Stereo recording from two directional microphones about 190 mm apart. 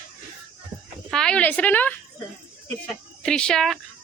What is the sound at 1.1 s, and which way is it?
A woman's voice, 5° left (ahead or behind).